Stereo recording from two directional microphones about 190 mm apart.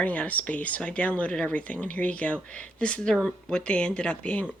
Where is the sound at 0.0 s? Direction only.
5° left (ahead or behind).